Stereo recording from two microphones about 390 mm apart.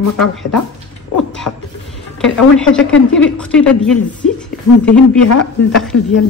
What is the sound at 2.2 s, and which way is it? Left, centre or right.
A woman's voice, centre.